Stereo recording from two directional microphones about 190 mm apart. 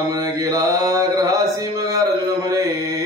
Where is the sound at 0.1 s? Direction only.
20° right (ahead or behind).